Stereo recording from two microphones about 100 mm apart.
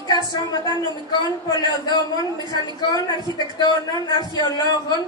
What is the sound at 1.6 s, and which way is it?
A man's voice, 40° left (ahead or behind).